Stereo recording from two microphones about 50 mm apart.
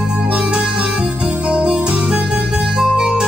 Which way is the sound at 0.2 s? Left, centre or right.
Right.